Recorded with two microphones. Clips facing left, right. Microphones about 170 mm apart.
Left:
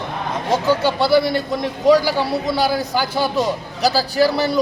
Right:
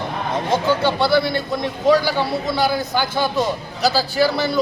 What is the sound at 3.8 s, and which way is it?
Speech, 35° left (ahead or behind).